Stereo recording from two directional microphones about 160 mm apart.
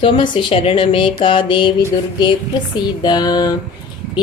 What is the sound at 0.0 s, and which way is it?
Speech, 35° left (ahead or behind).